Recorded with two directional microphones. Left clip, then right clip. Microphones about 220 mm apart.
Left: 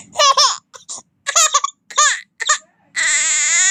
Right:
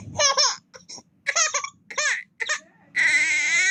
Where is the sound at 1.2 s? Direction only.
20° left (ahead or behind).